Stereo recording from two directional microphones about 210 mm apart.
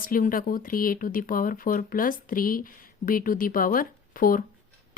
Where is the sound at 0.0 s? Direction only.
40° left (ahead or behind).